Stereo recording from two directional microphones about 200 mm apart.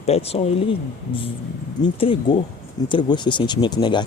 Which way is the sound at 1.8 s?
25° left (ahead or behind).